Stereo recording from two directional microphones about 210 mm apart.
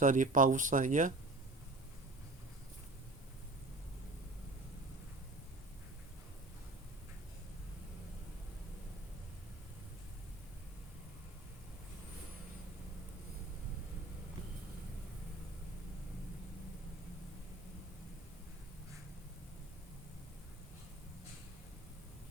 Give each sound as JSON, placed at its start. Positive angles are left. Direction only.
{"t": 0.0, "sound": "speech", "side_deg": -40}